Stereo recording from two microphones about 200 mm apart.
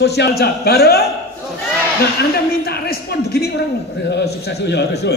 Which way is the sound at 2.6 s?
50° left (ahead or behind).